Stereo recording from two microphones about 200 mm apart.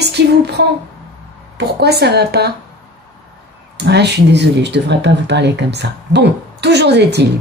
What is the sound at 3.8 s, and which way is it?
Speech, 55° right (ahead or behind).